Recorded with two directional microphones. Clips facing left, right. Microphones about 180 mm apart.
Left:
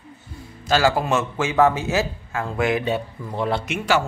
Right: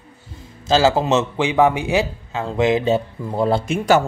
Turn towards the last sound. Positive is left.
turn(degrees=-35)  # may be behind; listen again after turning